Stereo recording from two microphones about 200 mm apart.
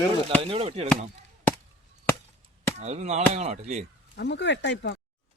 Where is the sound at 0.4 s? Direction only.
30° right (ahead or behind).